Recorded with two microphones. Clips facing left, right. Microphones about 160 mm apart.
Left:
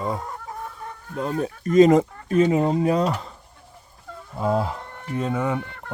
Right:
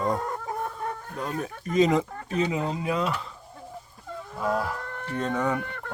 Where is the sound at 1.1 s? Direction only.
25° left (ahead or behind).